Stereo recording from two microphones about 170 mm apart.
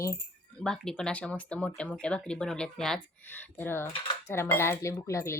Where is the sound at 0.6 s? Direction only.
5° left (ahead or behind).